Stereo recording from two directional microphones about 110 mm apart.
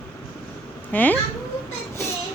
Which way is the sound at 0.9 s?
15° left (ahead or behind).